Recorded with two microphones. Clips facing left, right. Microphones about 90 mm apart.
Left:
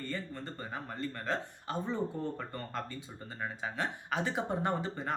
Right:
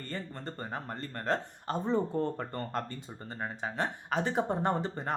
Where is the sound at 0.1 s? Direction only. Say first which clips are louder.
Even; 45° right (ahead or behind).